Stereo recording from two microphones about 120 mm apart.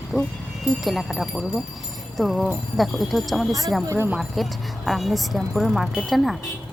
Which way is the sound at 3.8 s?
20° right (ahead or behind).